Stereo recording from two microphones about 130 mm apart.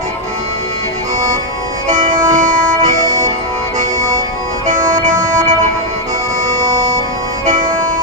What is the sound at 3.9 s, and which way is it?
Music, 30° right (ahead or behind).